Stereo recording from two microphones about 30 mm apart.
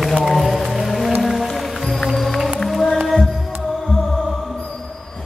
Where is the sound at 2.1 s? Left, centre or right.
Centre.